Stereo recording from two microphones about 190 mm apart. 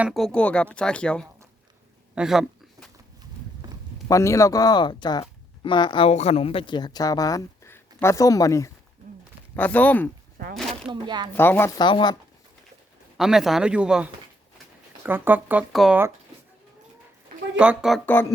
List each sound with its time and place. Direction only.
0.0 s speech: centre (ahead or behind)
2.1 s a sound: 5° right (ahead or behind)
4.1 s speech: 15° left (ahead or behind)
10.6 s a sound: centre (ahead or behind)
10.9 s speech: 25° right (ahead or behind)
11.3 s speech: 10° left (ahead or behind)
11.8 s speech: 25° left (ahead or behind)
13.1 s speech: centre (ahead or behind)
17.6 s speech: 5° right (ahead or behind)